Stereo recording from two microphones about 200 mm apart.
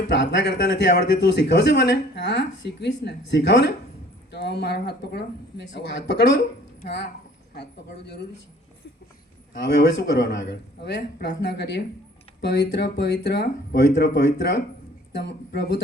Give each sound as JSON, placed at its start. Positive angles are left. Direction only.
{"t": 0.1, "sound": "a man's voice", "side_deg": 55}
{"t": 9.5, "sound": "a man's voice", "side_deg": 55}